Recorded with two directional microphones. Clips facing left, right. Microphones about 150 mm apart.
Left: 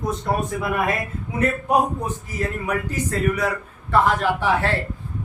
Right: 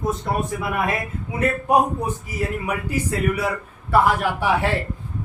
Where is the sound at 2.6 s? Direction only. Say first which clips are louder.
Even; 10° right (ahead or behind).